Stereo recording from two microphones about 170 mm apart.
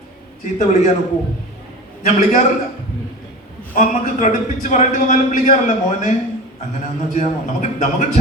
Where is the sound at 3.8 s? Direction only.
50° left (ahead or behind).